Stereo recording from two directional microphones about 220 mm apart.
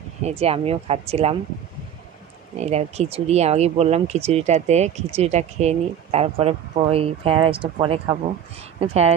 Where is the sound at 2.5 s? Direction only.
30° right (ahead or behind).